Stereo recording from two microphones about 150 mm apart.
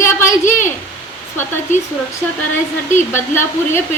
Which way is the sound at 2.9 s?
15° left (ahead or behind).